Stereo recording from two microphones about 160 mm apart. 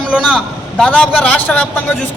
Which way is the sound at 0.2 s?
5° left (ahead or behind).